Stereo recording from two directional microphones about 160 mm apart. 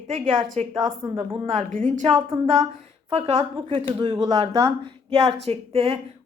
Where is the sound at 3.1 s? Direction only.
40° right (ahead or behind).